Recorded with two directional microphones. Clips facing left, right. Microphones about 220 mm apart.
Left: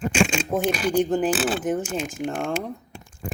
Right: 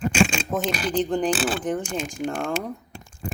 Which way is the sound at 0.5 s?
10° left (ahead or behind).